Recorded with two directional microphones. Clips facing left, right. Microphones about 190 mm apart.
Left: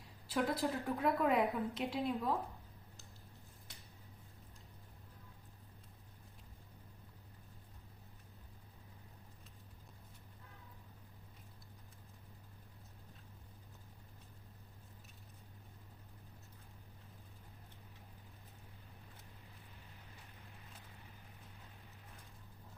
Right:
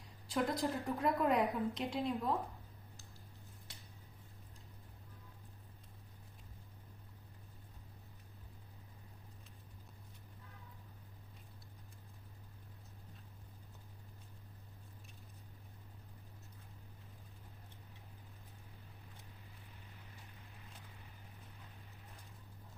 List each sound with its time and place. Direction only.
0.3 s a woman's voice: 5° left (ahead or behind)